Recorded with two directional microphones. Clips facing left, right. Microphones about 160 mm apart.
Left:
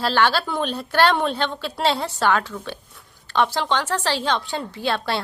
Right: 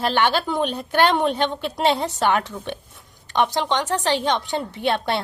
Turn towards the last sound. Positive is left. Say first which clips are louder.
# right 2 dB
turn(degrees=-20)  # may be behind; listen again after turning